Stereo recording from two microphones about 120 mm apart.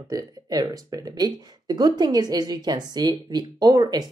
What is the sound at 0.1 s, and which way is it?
Speech, 30° right (ahead or behind).